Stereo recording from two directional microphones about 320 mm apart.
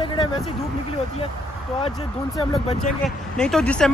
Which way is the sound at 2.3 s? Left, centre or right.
Centre.